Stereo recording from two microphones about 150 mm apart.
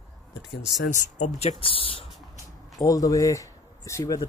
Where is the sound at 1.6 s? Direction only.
35° left (ahead or behind).